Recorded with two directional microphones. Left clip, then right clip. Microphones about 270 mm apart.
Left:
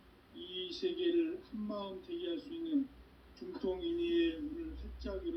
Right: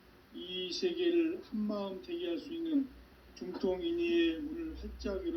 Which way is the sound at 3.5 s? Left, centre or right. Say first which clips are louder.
Right 3 dB; right.